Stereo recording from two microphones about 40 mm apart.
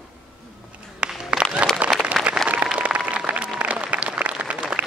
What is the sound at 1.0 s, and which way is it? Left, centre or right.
Music, right.